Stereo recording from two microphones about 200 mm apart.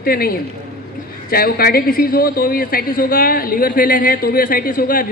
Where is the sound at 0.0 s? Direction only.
50° left (ahead or behind).